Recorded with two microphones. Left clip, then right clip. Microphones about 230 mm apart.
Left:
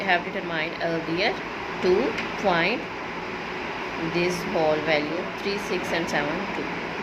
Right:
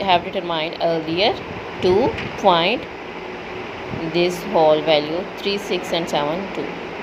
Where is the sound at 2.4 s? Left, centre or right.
Centre.